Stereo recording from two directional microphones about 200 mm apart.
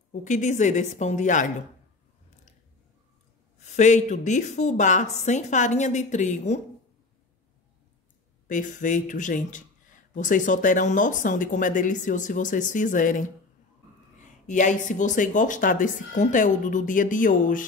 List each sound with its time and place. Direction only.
0.1 s speech: 35° left (ahead or behind)
3.6 s speech: 35° left (ahead or behind)
8.5 s speech: 40° left (ahead or behind)
14.5 s speech: 40° left (ahead or behind)